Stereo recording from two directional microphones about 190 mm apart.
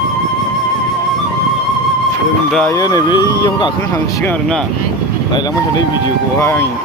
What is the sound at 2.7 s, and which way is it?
Speech, 20° left (ahead or behind).